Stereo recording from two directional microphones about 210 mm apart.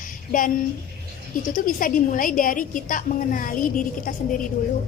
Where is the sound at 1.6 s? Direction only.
40° left (ahead or behind).